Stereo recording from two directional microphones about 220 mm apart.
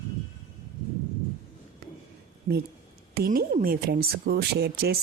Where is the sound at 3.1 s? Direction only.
45° right (ahead or behind).